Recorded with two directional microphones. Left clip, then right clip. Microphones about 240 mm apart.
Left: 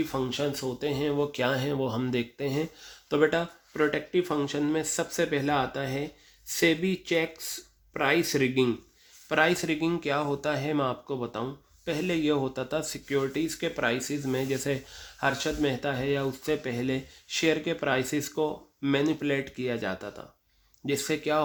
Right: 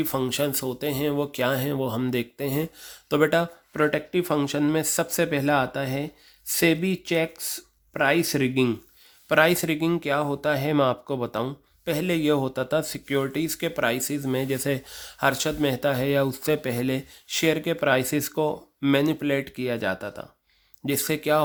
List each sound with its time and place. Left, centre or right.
0.0 s speech: right